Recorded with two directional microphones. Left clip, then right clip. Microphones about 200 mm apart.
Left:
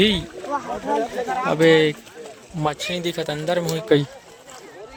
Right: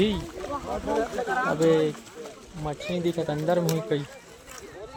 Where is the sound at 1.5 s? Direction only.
5° left (ahead or behind).